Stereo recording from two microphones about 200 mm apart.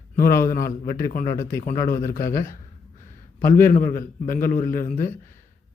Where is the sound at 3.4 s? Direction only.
40° left (ahead or behind).